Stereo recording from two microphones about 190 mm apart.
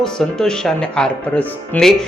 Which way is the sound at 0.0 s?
5° left (ahead or behind).